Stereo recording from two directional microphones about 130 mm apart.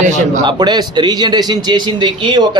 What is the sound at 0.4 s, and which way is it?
A man's voice, 35° right (ahead or behind).